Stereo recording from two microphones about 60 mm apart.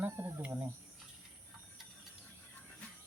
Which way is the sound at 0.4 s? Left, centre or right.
Right.